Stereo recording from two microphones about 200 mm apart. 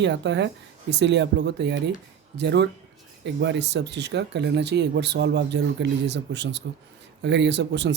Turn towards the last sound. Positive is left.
turn(degrees=-60)  # may be behind; listen again after turning